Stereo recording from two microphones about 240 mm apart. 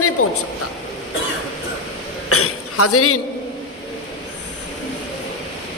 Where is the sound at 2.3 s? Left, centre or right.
Left.